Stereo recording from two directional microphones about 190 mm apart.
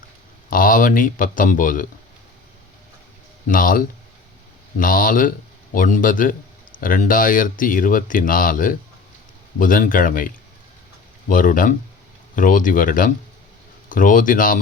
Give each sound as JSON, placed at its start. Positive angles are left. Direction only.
{"t": 0.5, "sound": "speech", "side_deg": 45}
{"t": 3.4, "sound": "speech", "side_deg": 45}